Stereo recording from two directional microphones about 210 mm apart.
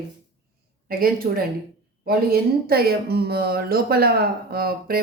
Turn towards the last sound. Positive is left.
turn(degrees=-45)  # may be behind; listen again after turning